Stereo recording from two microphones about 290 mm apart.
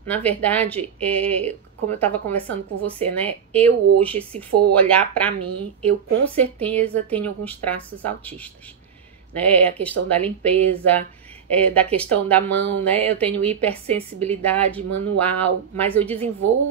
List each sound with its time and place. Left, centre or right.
0.0 s speech: centre
4.5 s speech: right
4.7 s speech: centre